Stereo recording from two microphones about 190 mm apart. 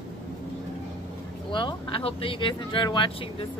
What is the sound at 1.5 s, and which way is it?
Speech, 25° left (ahead or behind).